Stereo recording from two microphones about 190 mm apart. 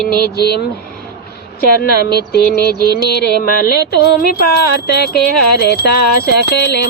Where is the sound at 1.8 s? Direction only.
55° left (ahead or behind).